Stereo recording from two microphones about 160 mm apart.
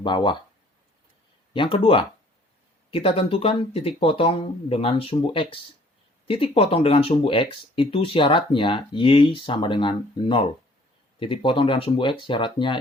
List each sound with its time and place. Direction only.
0.0 s speech: 30° left (ahead or behind)
1.5 s speech: 30° left (ahead or behind)